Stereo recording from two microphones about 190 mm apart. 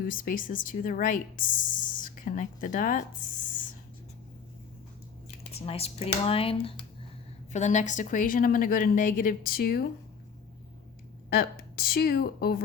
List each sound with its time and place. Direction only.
0.1 s speech: 45° left (ahead or behind)
5.5 s speech: 30° left (ahead or behind); by 9.8 s 50° left (ahead or behind)
11.3 s speech: 50° left (ahead or behind)